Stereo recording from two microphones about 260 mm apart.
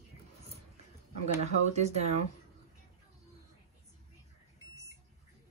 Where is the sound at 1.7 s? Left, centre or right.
Right.